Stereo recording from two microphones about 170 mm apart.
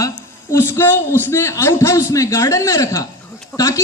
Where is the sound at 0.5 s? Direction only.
15° left (ahead or behind).